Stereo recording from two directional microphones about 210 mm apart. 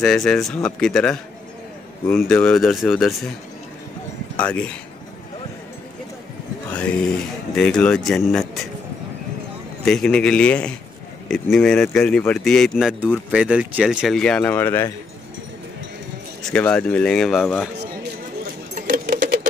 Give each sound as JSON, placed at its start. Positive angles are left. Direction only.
{"t": 0.0, "sound": "speech", "side_deg": 5}
{"t": 4.4, "sound": "speech", "side_deg": 5}
{"t": 6.7, "sound": "speech", "side_deg": 5}
{"t": 9.8, "sound": "speech", "side_deg": 5}
{"t": 16.4, "sound": "speech", "side_deg": 5}
{"t": 18.8, "sound": "a sound", "side_deg": -40}